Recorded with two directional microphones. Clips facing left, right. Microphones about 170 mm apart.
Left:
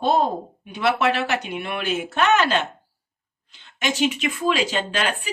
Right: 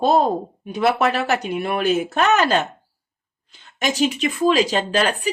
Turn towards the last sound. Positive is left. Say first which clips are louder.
# right 5 dB
turn(degrees=-40)  # may be behind; listen again after turning